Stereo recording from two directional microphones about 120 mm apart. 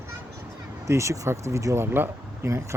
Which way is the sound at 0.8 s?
25° right (ahead or behind).